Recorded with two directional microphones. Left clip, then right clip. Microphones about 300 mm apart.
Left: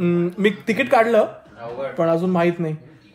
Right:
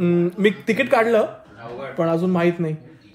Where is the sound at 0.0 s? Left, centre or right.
Centre.